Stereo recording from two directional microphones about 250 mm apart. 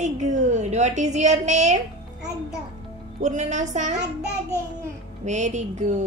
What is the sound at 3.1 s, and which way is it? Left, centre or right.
Speech, right.